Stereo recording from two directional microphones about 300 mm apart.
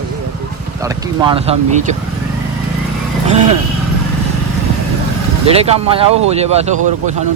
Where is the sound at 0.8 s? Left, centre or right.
Centre.